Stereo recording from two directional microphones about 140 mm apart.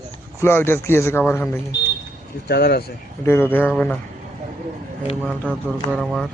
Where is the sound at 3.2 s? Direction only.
15° left (ahead or behind).